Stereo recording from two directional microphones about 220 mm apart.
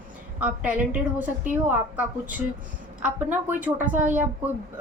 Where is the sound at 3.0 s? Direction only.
5° right (ahead or behind).